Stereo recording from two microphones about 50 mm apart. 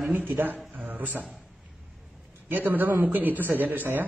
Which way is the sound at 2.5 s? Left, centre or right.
Right.